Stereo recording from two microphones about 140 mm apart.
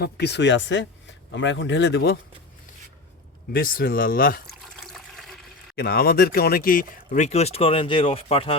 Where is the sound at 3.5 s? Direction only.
90° left.